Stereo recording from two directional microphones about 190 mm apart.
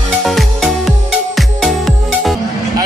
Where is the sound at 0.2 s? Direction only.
Centre (ahead or behind).